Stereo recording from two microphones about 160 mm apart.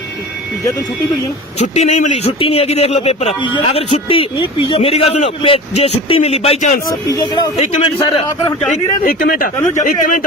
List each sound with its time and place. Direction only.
1.6 s speech: 45° left (ahead or behind)
3.4 s speech: 30° left (ahead or behind)
7.1 s speech: 25° left (ahead or behind)
7.5 s speech: 35° left (ahead or behind)
9.0 s speech: 60° left (ahead or behind)